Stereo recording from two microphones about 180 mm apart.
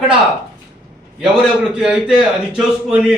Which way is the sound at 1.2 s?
5° right (ahead or behind).